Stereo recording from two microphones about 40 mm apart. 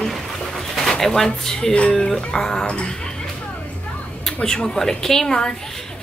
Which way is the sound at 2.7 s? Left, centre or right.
Left.